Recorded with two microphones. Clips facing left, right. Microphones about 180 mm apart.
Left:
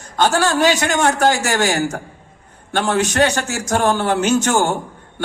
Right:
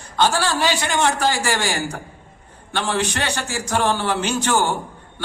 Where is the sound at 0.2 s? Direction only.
45° left (ahead or behind).